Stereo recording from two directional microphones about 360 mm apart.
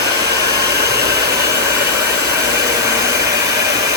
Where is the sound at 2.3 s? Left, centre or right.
Centre.